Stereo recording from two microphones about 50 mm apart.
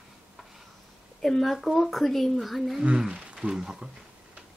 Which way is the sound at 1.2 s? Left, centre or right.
Centre.